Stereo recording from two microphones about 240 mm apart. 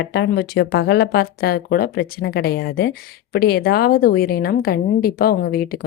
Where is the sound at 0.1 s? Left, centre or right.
Left.